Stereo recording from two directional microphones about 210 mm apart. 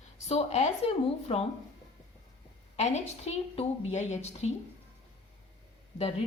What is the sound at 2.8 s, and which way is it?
A woman's voice, 30° left (ahead or behind).